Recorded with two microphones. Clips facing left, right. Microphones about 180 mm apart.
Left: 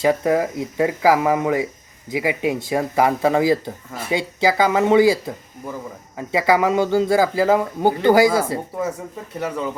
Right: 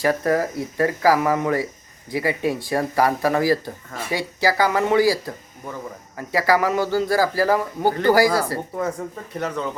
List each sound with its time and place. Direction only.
0.0 s a man's voice: 15° left (ahead or behind)